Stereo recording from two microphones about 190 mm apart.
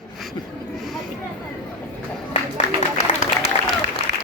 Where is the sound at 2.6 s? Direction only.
80° right.